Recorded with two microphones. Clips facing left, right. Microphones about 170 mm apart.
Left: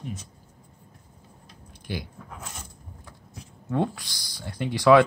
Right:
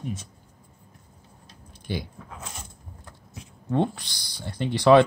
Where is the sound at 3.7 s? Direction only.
25° right (ahead or behind).